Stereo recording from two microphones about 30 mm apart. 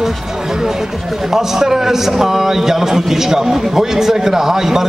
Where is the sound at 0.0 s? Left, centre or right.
Centre.